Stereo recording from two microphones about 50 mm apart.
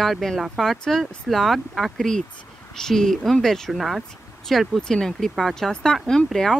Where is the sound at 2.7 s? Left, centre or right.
Centre.